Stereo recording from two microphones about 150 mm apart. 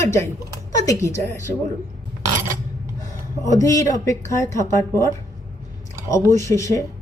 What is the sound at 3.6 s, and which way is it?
A woman's voice, 20° left (ahead or behind).